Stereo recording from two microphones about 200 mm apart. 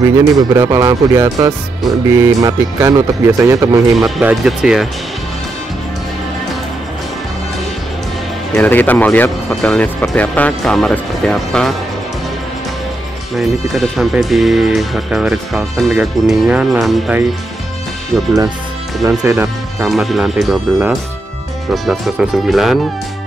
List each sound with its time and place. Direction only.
0.0 s speech: 15° right (ahead or behind)
4.0 s speech: 5° right (ahead or behind)
8.5 s speech: 10° left (ahead or behind)
13.4 s speech: centre (ahead or behind)
19.0 s speech: 15° right (ahead or behind)
19.9 s speech: centre (ahead or behind)